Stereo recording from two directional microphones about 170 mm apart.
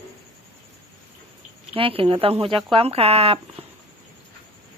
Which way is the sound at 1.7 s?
35° right (ahead or behind).